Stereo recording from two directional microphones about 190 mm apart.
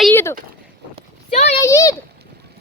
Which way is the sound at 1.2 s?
35° left (ahead or behind).